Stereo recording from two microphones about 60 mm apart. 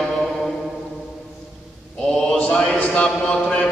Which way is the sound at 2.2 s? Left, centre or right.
Centre.